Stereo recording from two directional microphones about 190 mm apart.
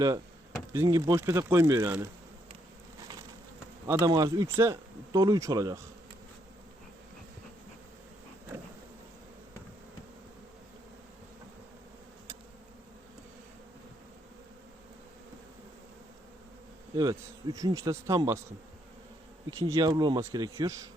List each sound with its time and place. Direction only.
0.7 s speech: 15° right (ahead or behind)
3.9 s speech: 20° right (ahead or behind)
16.9 s speech: 20° right (ahead or behind)
19.5 s speech: 15° right (ahead or behind)